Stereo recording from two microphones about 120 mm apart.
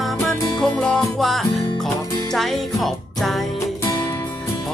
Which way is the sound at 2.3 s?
Centre (ahead or behind).